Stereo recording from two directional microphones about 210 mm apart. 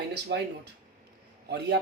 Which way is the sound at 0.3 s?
50° right (ahead or behind).